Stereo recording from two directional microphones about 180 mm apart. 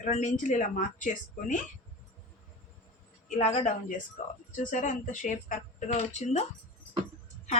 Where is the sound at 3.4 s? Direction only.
40° left (ahead or behind).